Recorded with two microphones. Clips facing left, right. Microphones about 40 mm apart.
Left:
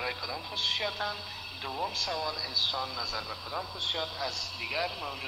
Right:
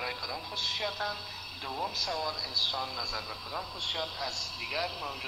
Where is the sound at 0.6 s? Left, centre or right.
Centre.